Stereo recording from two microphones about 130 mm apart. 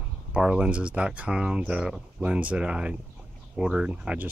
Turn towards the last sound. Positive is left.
turn(degrees=-10)  # may be behind; listen again after turning